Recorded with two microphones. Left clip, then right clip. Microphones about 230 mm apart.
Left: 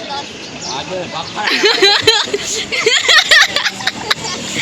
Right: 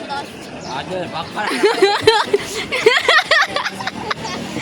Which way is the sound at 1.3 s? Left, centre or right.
Centre.